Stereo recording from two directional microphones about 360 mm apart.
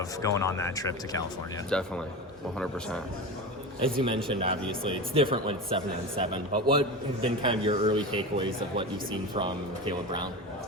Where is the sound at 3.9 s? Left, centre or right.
Centre.